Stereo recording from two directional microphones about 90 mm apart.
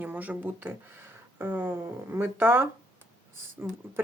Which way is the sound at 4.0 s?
25° right (ahead or behind).